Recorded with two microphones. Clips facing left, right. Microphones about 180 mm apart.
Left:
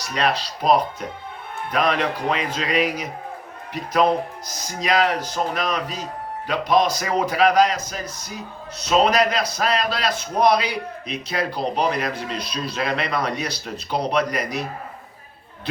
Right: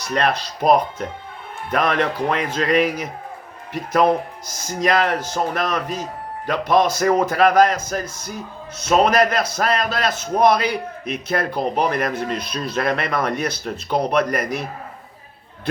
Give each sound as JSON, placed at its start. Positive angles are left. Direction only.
{"t": 0.1, "sound": "a man's voice", "side_deg": -55}
{"t": 4.8, "sound": "a man's voice", "side_deg": -55}